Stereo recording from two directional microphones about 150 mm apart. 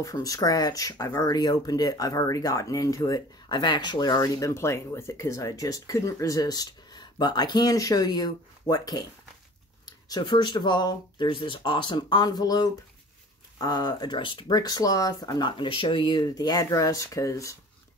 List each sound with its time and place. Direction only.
0.0 s speech: 25° left (ahead or behind)